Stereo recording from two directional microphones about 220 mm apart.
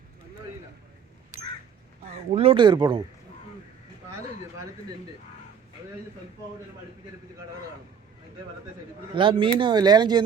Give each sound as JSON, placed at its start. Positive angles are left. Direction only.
{"t": 2.3, "sound": "speech", "side_deg": -25}
{"t": 9.1, "sound": "speech", "side_deg": -20}